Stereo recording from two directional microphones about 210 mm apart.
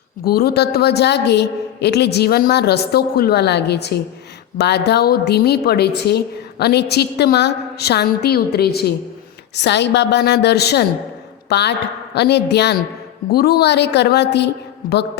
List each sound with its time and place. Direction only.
0.3 s a woman's voice: 45° left (ahead or behind)